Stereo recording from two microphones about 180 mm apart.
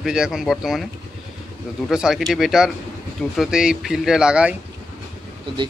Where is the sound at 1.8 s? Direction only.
5° right (ahead or behind).